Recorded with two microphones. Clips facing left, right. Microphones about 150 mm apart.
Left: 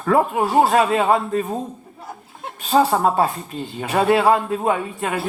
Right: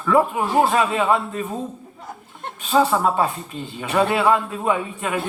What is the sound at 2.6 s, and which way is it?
A man's voice, 40° left (ahead or behind).